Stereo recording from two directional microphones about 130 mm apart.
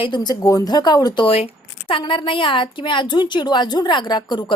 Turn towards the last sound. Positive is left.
turn(degrees=35)  # may be behind; listen again after turning